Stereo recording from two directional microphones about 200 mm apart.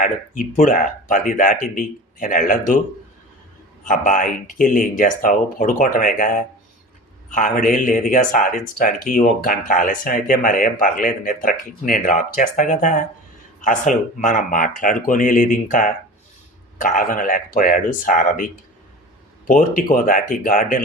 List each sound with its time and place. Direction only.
0.0 s speech: 45° left (ahead or behind)
3.8 s speech: 40° left (ahead or behind)